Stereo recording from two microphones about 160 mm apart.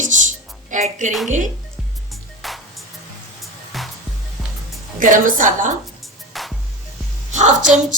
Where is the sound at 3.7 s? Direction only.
Centre (ahead or behind).